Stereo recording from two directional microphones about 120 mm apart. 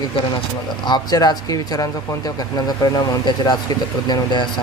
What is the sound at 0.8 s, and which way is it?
Speech, 35° left (ahead or behind).